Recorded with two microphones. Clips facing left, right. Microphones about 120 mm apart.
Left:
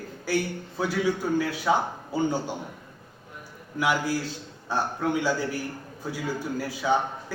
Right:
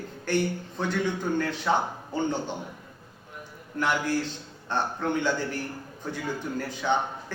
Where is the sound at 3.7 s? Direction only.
10° left (ahead or behind).